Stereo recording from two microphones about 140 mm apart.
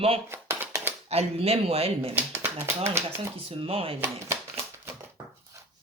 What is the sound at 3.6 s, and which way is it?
Speech, 40° right (ahead or behind).